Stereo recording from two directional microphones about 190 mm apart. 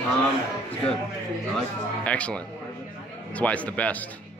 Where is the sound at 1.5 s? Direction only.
5° left (ahead or behind).